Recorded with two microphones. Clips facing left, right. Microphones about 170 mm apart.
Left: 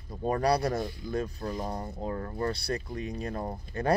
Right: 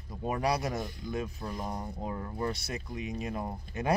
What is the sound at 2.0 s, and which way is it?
Speech, 15° right (ahead or behind).